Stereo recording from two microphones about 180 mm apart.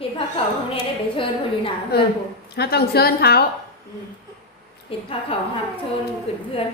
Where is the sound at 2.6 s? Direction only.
60° left (ahead or behind).